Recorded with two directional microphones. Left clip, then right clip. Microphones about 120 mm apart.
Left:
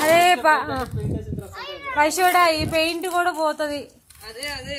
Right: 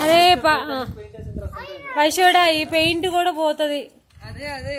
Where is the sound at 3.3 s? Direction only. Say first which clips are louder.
Right 2 dB; 45° right (ahead or behind).